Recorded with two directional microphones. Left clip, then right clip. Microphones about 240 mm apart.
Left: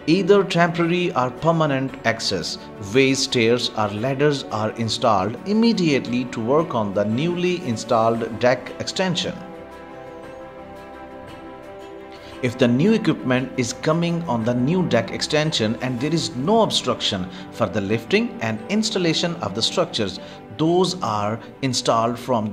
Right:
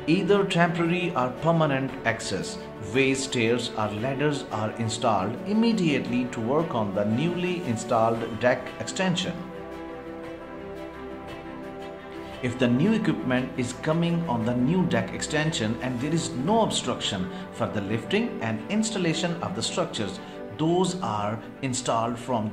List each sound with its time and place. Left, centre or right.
0.0 s speech: left
12.4 s speech: left